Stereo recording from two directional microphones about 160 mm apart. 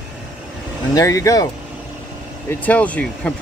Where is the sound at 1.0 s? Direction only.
20° left (ahead or behind).